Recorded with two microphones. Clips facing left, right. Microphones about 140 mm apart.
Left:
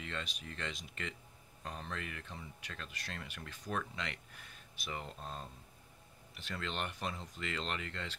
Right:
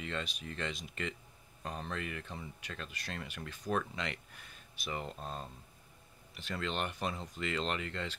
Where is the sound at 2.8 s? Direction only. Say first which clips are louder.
Right 3 dB; 15° right (ahead or behind).